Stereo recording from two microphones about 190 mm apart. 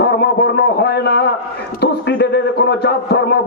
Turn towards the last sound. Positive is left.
turn(degrees=60)  # may be behind; listen again after turning